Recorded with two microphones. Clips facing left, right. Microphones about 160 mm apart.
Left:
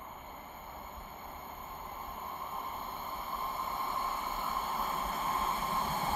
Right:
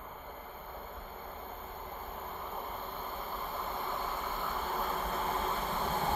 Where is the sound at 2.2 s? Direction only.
65° right (ahead or behind).